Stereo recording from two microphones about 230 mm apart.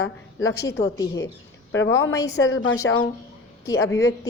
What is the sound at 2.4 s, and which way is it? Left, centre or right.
Speech, left.